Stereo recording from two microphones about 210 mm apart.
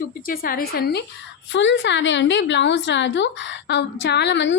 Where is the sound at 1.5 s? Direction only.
60° left (ahead or behind).